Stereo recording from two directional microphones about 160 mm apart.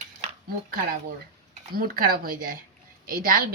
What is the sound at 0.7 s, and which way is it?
A woman's voice, 65° right (ahead or behind).